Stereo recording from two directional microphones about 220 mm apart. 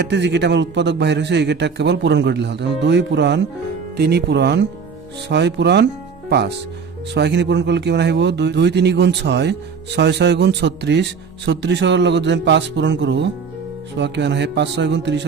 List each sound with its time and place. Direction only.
0.0 s speech: 50° right (ahead or behind)
7.1 s speech: 50° right (ahead or behind)